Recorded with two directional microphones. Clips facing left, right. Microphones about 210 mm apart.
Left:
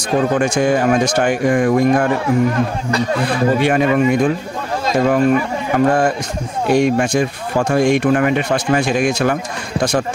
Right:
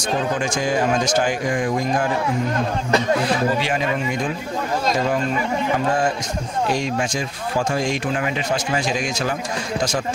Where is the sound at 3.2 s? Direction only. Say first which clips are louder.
Left 5 dB; 55° left (ahead or behind).